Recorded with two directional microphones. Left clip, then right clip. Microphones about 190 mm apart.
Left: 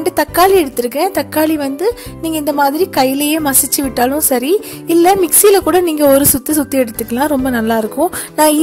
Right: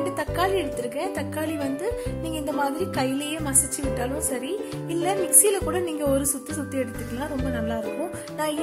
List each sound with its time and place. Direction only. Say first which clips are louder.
0.1 s a woman's voice: left 14 dB; 50° left (ahead or behind)